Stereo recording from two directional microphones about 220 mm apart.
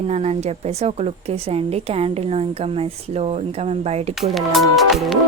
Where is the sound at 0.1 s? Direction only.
30° right (ahead or behind).